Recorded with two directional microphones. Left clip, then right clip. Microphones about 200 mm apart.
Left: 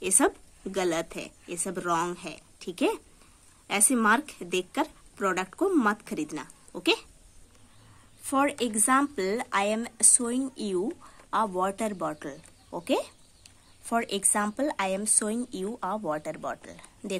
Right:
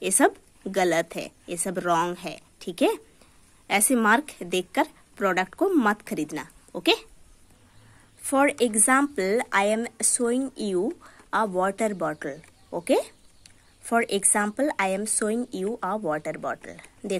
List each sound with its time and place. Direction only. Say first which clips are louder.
0.0 s a woman's voice: right 4 dB; 15° right (ahead or behind)
8.2 s speech: right 5 dB; 20° right (ahead or behind)